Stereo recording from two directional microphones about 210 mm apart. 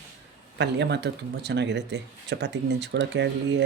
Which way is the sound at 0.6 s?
55° right (ahead or behind).